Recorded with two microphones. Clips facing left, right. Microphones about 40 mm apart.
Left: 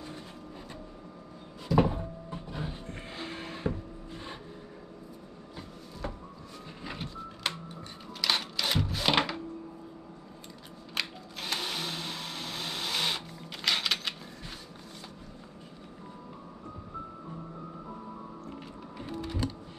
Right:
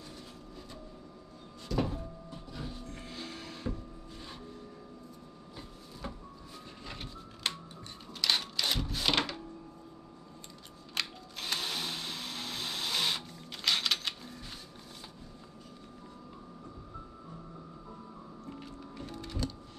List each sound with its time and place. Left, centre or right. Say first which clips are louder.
1.8 s a sound: left 7 dB; left
6.0 s music: left 4 dB; centre
6.8 s printer: left 6 dB; centre
7.6 s music: left 4 dB; centre
11.0 s a sound: left 2 dB; centre
18.5 s music: left 2 dB; centre